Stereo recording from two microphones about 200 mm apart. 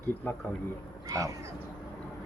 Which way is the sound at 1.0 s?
15° right (ahead or behind).